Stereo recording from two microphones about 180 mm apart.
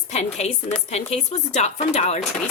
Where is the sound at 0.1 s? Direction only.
40° left (ahead or behind).